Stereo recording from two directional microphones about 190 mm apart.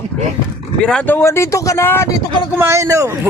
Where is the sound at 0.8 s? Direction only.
5° left (ahead or behind).